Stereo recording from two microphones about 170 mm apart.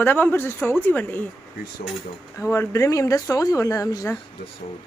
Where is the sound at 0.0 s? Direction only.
10° left (ahead or behind).